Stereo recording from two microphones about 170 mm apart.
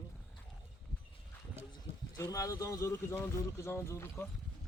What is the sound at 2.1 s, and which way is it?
Speech, 20° left (ahead or behind).